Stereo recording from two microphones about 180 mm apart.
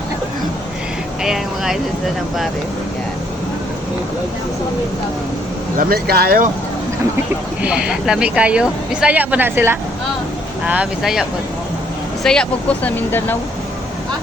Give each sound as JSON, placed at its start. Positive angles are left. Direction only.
{"t": 1.2, "sound": "speech", "side_deg": 0}
{"t": 5.7, "sound": "speech", "side_deg": -55}
{"t": 7.6, "sound": "speech", "side_deg": -5}